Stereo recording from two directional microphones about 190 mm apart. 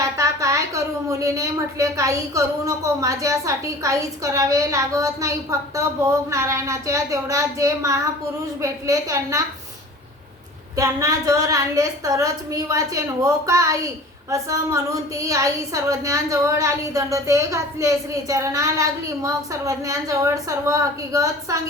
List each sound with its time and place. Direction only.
0.0 s a woman's voice: 15° right (ahead or behind)
10.8 s a woman's voice: 15° right (ahead or behind)